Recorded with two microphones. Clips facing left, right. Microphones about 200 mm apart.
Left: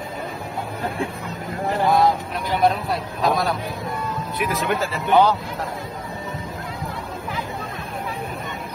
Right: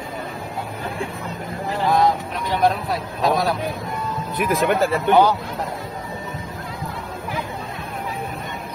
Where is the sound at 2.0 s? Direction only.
Centre (ahead or behind).